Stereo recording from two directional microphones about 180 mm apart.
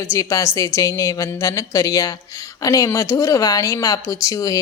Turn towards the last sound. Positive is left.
turn(degrees=20)  # may be behind; listen again after turning